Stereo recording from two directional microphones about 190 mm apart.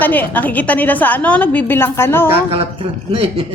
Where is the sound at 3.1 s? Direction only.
30° right (ahead or behind).